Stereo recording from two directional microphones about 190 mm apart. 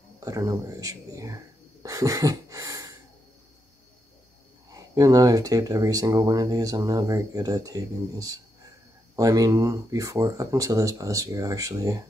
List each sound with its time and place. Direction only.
0.2 s speech: 20° right (ahead or behind)
4.7 s speech: 20° right (ahead or behind)